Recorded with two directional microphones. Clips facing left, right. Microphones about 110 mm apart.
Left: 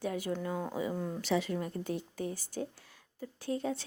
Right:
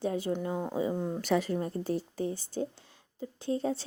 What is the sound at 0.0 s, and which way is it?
Speech, 30° right (ahead or behind).